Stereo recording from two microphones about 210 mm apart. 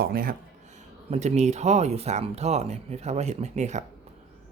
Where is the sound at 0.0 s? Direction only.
45° right (ahead or behind).